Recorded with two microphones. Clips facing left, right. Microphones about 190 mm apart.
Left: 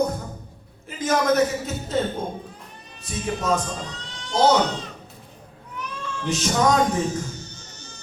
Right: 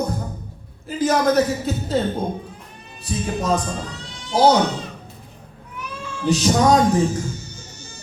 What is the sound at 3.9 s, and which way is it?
Cat, 10° right (ahead or behind).